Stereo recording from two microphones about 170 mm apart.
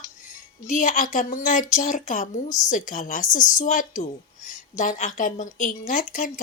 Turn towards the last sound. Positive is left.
turn(degrees=50)  # may be behind; listen again after turning